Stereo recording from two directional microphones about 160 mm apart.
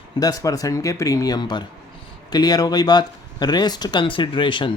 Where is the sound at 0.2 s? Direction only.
25° left (ahead or behind).